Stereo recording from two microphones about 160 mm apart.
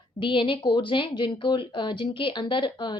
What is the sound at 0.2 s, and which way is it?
A woman's voice, 30° left (ahead or behind).